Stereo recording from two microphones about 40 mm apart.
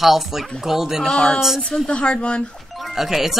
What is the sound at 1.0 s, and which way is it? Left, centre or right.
Speech, centre.